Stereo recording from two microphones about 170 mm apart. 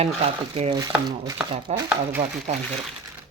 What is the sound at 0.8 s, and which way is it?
Speech, 20° right (ahead or behind).